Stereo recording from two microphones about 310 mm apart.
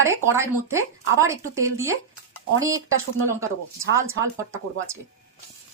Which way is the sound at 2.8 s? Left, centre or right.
Right.